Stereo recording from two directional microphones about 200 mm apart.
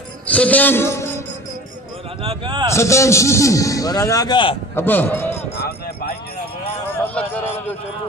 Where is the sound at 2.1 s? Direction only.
30° right (ahead or behind).